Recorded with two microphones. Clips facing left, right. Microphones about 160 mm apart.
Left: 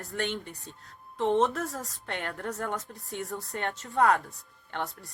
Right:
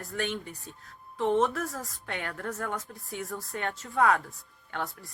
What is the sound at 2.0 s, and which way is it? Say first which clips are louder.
Speech: left 1 dB; 45° left (ahead or behind).